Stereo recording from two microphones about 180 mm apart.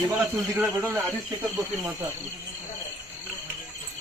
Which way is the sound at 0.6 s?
10° right (ahead or behind).